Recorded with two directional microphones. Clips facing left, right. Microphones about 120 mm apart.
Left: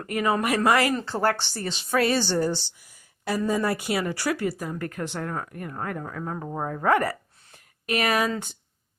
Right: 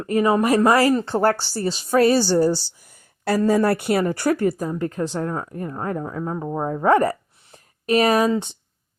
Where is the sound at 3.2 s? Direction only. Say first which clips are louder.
Right 7 dB; 75° right (ahead or behind); by 4.6 s 45° right (ahead or behind).